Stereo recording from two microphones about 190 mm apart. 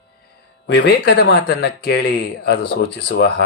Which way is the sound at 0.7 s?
60° left (ahead or behind).